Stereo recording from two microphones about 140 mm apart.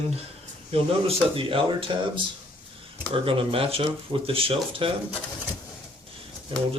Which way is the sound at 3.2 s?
40° right (ahead or behind).